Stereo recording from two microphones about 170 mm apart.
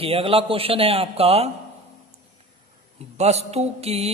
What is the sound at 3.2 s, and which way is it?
Speech, 40° right (ahead or behind).